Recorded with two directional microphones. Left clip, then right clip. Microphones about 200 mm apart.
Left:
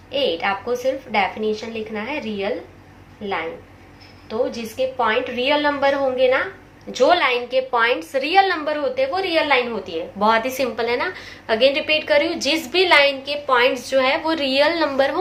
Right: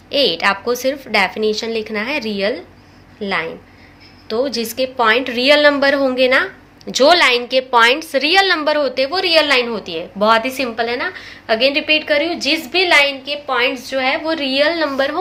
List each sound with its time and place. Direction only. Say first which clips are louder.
0.1 s a woman's voice: right 5 dB; 50° right (ahead or behind); by 15.2 s 10° right (ahead or behind)